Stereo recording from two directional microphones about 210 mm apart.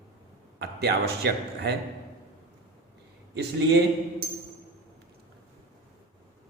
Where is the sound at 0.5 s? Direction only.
50° right (ahead or behind).